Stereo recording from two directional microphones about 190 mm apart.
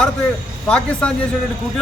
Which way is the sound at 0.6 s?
5° left (ahead or behind).